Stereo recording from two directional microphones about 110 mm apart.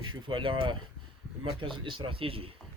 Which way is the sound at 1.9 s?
50° right (ahead or behind).